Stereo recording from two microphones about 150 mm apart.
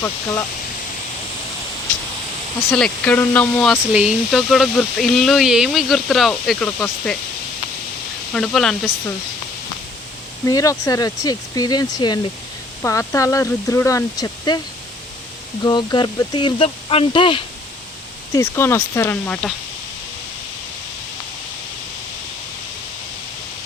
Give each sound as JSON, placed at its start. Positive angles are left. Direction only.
{"t": 0.0, "sound": "speech", "side_deg": 20}
{"t": 2.6, "sound": "speech", "side_deg": 5}
{"t": 3.9, "sound": "speech", "side_deg": -5}
{"t": 8.3, "sound": "speech", "side_deg": 0}
{"t": 10.4, "sound": "speech", "side_deg": 20}
{"t": 15.6, "sound": "speech", "side_deg": 30}
{"t": 18.3, "sound": "speech", "side_deg": 20}